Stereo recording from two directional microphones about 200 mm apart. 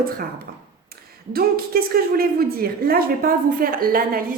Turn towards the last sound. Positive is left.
turn(degrees=-45)  # may be behind; listen again after turning